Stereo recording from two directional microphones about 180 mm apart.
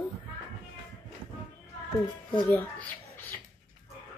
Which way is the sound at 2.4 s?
10° left (ahead or behind).